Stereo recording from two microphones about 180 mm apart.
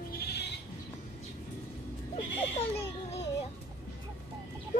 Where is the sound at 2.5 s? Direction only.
35° left (ahead or behind).